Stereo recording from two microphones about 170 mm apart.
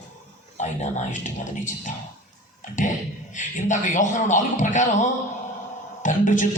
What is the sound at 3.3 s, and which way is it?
A man's voice, 45° left (ahead or behind).